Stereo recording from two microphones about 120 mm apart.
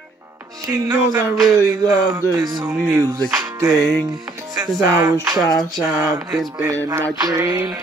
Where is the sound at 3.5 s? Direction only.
30° right (ahead or behind).